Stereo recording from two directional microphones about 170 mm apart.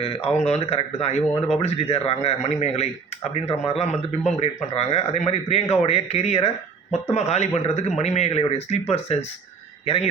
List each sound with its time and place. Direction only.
0.0 s a man's voice: 35° left (ahead or behind)